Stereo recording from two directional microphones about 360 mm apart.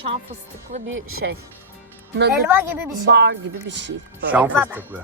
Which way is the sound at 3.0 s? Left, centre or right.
Right.